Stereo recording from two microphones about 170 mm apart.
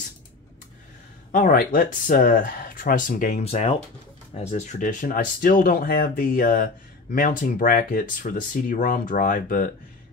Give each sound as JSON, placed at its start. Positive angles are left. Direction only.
{"t": 1.3, "sound": "speech", "side_deg": 55}
{"t": 3.4, "sound": "speech", "side_deg": 40}